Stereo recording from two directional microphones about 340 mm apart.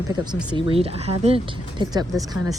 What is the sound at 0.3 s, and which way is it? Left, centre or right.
Speech, centre.